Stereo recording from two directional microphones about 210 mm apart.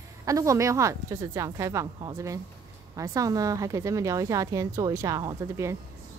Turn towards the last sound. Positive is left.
turn(degrees=-15)  # may be behind; listen again after turning